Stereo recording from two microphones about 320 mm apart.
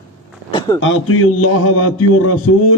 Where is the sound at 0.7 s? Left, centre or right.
Left.